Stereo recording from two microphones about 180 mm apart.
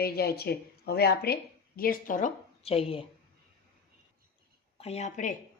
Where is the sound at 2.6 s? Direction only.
30° left (ahead or behind).